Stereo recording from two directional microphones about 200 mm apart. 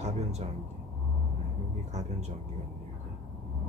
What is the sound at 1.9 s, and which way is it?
Speech, 35° right (ahead or behind).